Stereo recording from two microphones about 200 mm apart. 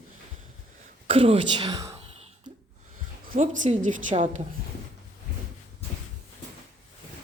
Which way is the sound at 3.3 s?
40° right (ahead or behind).